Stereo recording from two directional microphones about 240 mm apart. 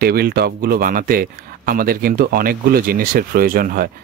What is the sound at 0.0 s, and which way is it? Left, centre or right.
Speech, right.